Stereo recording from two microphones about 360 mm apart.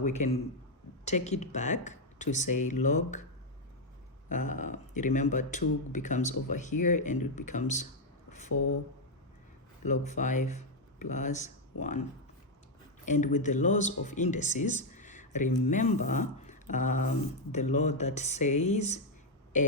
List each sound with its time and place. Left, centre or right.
0.0 s speech: centre
4.3 s speech: left
8.3 s a sound: centre
8.5 s a sound: left
9.8 s speech: centre
13.1 s speech: left